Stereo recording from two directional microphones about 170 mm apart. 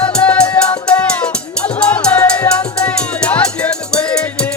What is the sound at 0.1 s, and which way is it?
Music, 5° left (ahead or behind).